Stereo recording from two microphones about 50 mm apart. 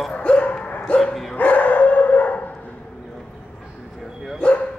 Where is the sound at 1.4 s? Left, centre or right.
Left.